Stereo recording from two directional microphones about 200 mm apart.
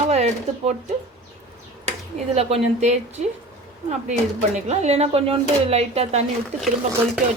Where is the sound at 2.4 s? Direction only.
30° right (ahead or behind).